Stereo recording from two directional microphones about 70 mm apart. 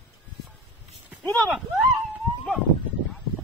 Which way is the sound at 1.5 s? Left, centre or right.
Right.